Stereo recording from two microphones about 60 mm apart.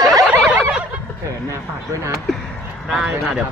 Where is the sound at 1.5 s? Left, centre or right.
Right.